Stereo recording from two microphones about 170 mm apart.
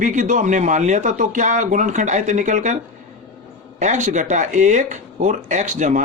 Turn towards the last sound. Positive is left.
turn(degrees=-45)  # may be behind; listen again after turning